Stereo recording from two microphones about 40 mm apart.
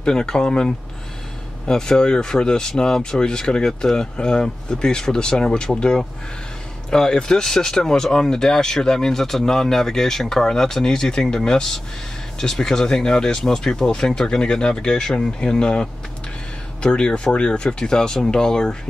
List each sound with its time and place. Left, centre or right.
0.0 s speech: centre